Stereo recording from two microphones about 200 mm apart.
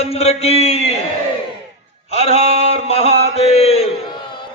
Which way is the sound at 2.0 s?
30° left (ahead or behind).